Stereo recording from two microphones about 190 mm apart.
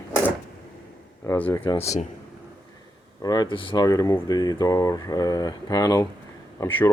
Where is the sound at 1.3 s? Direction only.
10° left (ahead or behind).